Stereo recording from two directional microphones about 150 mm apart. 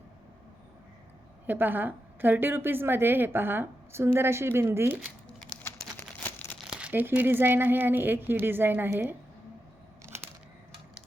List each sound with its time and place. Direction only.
1.5 s a woman's voice: 10° right (ahead or behind)
5.6 s a sound: 10° left (ahead or behind)
6.7 s a woman's voice: 5° right (ahead or behind)